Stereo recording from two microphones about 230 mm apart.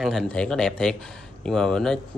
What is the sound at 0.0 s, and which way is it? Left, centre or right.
Speech, centre.